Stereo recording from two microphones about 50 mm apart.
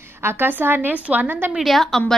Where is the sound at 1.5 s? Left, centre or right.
Centre.